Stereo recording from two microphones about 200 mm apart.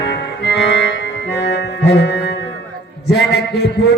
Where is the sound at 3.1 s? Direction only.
55° left (ahead or behind).